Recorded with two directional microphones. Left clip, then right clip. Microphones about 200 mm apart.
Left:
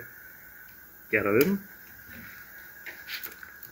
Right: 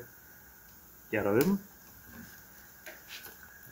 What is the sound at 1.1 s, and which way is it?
Speech, 20° right (ahead or behind).